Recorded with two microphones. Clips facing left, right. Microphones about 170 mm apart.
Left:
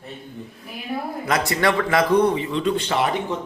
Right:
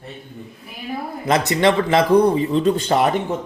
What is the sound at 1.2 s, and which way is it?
A man's voice, 25° right (ahead or behind).